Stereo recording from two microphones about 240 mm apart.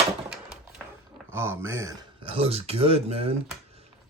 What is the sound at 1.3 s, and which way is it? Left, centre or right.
Speech, centre.